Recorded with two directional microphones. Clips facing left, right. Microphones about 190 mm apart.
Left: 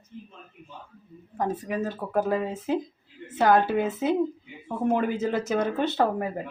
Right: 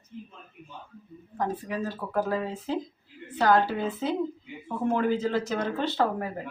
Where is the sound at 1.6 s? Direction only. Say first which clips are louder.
Left 3 dB; 20° left (ahead or behind).